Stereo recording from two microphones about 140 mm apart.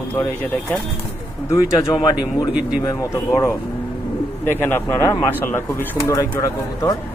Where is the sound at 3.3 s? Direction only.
20° left (ahead or behind).